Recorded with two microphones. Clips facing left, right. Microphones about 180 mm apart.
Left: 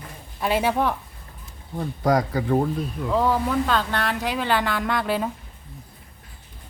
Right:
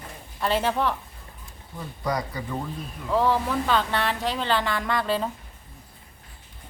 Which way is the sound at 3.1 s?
Centre (ahead or behind).